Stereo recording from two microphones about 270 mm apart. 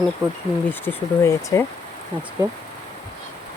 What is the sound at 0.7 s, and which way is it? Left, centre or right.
Speech, centre.